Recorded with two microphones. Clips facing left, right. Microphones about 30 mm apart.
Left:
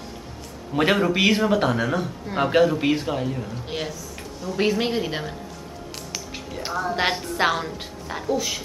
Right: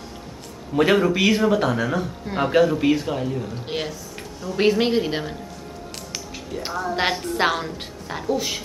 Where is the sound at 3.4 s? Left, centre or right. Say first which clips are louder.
Right 2 dB; centre.